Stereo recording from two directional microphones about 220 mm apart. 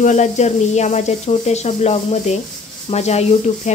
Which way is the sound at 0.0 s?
30° left (ahead or behind).